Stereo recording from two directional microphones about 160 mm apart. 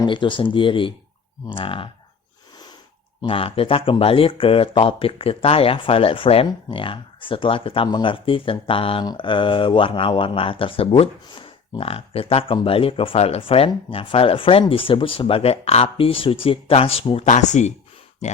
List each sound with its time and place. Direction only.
0.0 s speech: 30° left (ahead or behind)
3.2 s speech: 35° left (ahead or behind)
17.2 s speech: 50° left (ahead or behind)